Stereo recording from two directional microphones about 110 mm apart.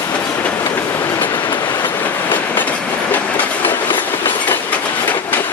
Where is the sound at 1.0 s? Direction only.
20° left (ahead or behind).